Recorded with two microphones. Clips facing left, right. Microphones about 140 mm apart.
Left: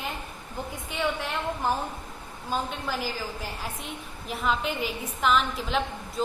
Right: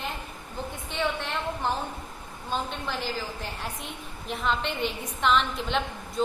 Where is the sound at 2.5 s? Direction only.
5° left (ahead or behind).